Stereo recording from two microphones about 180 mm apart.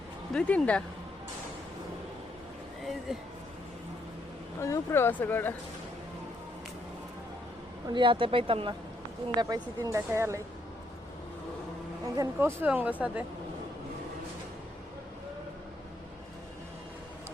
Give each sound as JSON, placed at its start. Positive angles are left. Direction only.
{"t": 0.3, "sound": "speech", "side_deg": 5}
{"t": 2.8, "sound": "a sound", "side_deg": 0}
{"t": 4.6, "sound": "speech", "side_deg": 15}
{"t": 7.9, "sound": "speech", "side_deg": -25}
{"t": 12.1, "sound": "speech", "side_deg": -15}